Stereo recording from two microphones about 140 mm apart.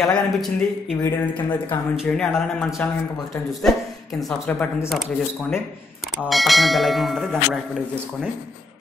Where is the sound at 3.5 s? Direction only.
Centre (ahead or behind).